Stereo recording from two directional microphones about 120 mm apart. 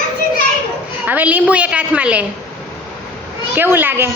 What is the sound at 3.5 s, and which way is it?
Speech, 15° right (ahead or behind).